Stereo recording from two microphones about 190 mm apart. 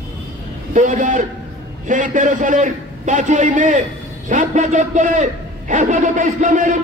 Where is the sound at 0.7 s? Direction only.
40° right (ahead or behind).